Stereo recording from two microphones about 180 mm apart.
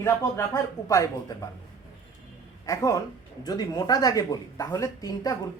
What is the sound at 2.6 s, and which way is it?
Speech, 20° left (ahead or behind).